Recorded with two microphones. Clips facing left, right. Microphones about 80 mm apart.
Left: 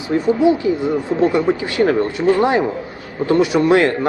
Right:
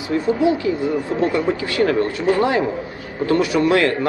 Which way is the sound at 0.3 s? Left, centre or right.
Left.